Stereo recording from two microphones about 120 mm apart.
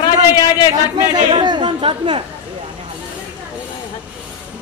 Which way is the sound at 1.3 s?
40° right (ahead or behind).